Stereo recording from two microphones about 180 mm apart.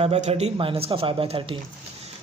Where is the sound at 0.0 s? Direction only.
35° right (ahead or behind).